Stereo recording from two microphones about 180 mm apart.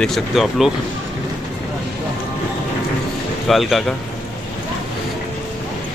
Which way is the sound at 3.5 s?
Centre (ahead or behind).